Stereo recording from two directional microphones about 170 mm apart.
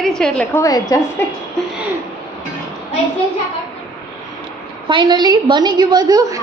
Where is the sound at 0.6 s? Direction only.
20° left (ahead or behind).